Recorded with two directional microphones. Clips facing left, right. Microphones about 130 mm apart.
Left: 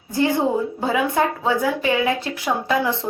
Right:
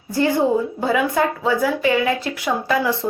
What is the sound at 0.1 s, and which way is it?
A woman's voice, 20° left (ahead or behind).